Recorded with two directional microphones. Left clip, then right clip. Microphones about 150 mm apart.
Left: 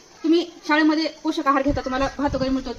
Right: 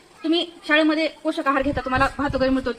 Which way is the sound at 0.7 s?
90° right.